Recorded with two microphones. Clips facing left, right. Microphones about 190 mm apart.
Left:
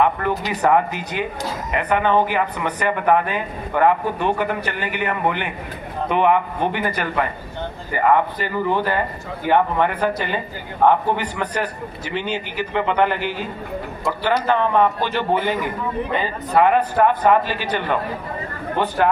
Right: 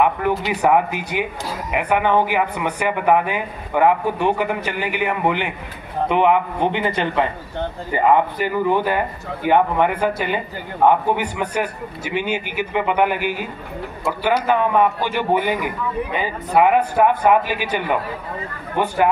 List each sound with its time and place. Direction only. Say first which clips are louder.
0.5 s a man's voice: even; 10° right (ahead or behind)